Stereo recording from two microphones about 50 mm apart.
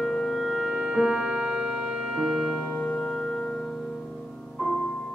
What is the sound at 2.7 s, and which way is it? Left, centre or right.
Music, left.